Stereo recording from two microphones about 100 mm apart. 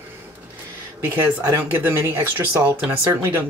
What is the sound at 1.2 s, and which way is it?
Speech, 25° right (ahead or behind).